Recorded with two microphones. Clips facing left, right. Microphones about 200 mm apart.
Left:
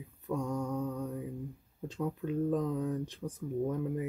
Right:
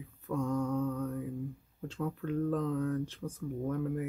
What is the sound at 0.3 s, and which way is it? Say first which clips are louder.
Mantra: right 2 dB; 15° left (ahead or behind).